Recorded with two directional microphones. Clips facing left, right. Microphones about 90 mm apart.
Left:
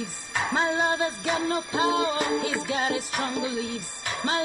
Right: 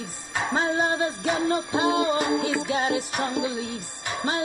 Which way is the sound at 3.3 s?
40° right (ahead or behind).